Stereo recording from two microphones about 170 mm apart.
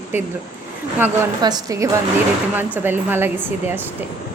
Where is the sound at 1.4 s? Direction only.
20° right (ahead or behind).